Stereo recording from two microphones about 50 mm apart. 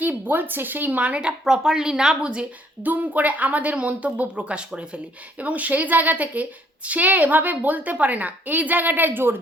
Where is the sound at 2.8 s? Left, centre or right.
Right.